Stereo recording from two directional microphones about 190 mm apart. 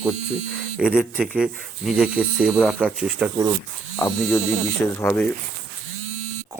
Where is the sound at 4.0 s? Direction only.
15° left (ahead or behind).